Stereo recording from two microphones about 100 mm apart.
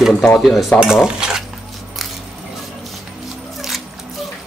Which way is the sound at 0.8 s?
5° right (ahead or behind).